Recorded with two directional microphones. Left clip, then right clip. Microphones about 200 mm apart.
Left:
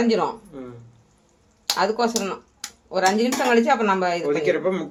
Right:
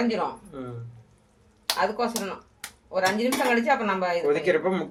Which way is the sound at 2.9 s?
55° left (ahead or behind).